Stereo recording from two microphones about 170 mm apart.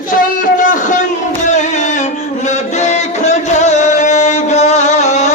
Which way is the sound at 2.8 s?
40° left (ahead or behind).